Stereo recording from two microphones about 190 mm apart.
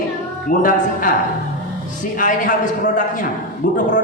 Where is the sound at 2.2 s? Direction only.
45° left (ahead or behind).